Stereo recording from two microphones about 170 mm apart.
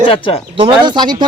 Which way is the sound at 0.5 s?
30° right (ahead or behind).